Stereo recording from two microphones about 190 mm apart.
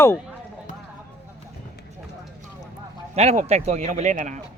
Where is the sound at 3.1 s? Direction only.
35° right (ahead or behind).